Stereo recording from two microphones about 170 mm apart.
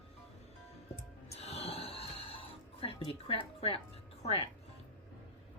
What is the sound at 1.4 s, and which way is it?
Music, 35° left (ahead or behind).